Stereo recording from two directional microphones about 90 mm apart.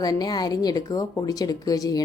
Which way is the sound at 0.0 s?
45° left (ahead or behind).